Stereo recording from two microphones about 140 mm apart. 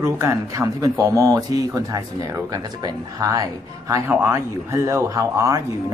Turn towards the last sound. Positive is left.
turn(degrees=-25)  # may be behind; listen again after turning